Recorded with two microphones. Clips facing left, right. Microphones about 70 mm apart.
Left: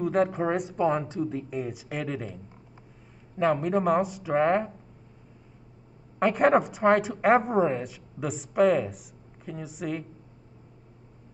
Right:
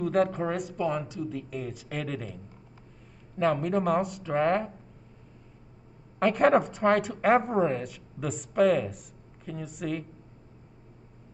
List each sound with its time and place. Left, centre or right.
0.0 s a woman's voice: centre
0.4 s speech: centre
1.0 s a woman's voice: left
1.5 s speech: centre
3.3 s speech: centre
6.1 s a woman's voice: centre